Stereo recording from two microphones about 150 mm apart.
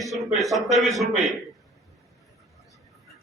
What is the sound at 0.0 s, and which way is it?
A man's voice, centre (ahead or behind).